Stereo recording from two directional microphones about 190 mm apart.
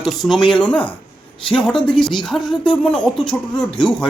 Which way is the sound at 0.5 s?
5° left (ahead or behind).